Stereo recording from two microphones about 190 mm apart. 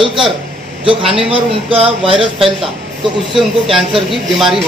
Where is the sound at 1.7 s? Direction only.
30° right (ahead or behind).